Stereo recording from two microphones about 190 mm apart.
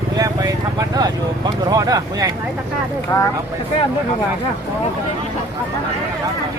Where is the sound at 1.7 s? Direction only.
20° right (ahead or behind).